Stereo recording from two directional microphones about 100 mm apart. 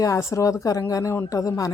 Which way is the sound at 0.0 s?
30° left (ahead or behind).